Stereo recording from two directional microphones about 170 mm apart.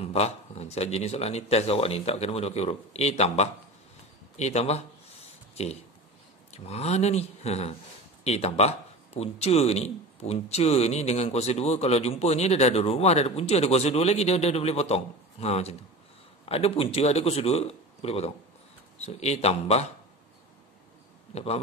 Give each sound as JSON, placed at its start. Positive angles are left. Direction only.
{"t": 0.0, "sound": "speech", "side_deg": 40}
{"t": 6.5, "sound": "speech", "side_deg": 40}
{"t": 21.3, "sound": "speech", "side_deg": 35}